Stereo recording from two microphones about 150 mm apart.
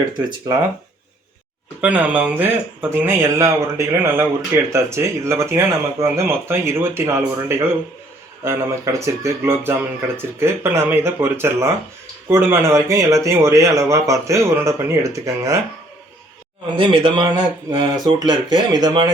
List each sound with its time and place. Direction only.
1.8 s speech: 10° right (ahead or behind)
16.7 s speech: 35° right (ahead or behind)